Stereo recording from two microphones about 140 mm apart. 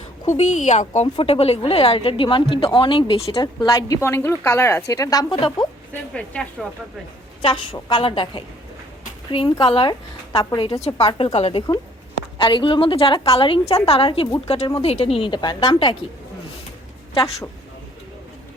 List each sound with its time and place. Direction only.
0.3 s speech: 55° left (ahead or behind)
1.0 s speech: 40° left (ahead or behind)
3.6 s a woman's voice: 25° left (ahead or behind)
5.9 s speech: 10° left (ahead or behind)
7.4 s speech: 40° left (ahead or behind)
10.8 s speech: 50° left (ahead or behind)
12.4 s speech: 35° left (ahead or behind)